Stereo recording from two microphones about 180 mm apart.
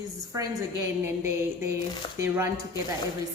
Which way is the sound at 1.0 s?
15° right (ahead or behind).